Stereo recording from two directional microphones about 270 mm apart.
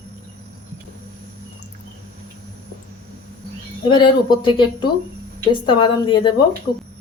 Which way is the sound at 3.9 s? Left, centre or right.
Centre.